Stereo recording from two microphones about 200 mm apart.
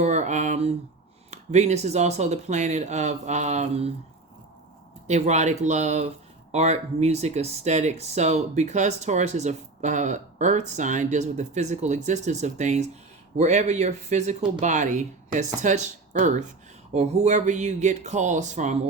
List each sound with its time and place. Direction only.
0.0 s speech: 35° right (ahead or behind)
5.0 s speech: 35° right (ahead or behind)